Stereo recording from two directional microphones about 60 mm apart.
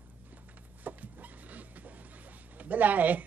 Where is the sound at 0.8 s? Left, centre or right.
Right.